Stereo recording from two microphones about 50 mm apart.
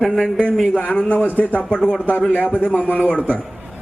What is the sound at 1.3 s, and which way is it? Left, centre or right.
Speech, left.